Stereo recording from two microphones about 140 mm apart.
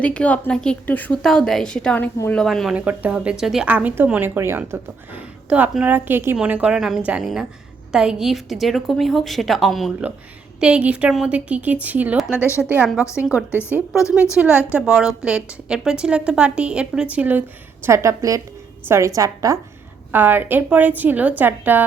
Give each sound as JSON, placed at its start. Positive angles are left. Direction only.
{"t": 0.0, "sound": "a woman's voice", "side_deg": 10}
{"t": 12.4, "sound": "speech", "side_deg": 20}
{"t": 12.6, "sound": "a woman's voice", "side_deg": -10}
{"t": 20.1, "sound": "speech", "side_deg": -15}